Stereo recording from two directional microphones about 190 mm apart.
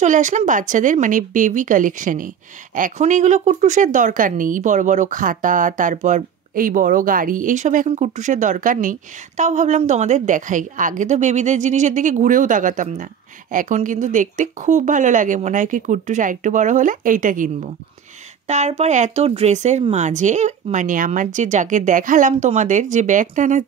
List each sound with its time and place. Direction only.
0.0 s a woman's voice: 40° right (ahead or behind)
18.5 s a woman's voice: 35° right (ahead or behind)